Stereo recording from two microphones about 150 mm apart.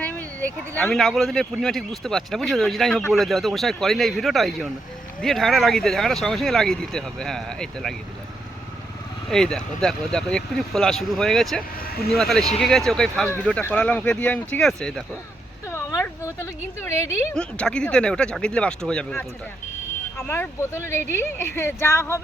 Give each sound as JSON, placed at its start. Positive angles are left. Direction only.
{"t": 0.0, "sound": "speech", "side_deg": 10}
{"t": 9.3, "sound": "speech", "side_deg": 5}
{"t": 11.9, "sound": "speech", "side_deg": 90}
{"t": 12.1, "sound": "speech", "side_deg": 0}
{"t": 15.7, "sound": "a woman's voice", "side_deg": 20}
{"t": 17.3, "sound": "speech", "side_deg": 5}